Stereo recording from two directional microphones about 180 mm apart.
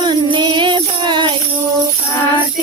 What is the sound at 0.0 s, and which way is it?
Music, 25° right (ahead or behind).